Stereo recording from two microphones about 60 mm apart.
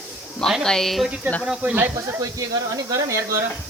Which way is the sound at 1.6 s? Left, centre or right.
Right.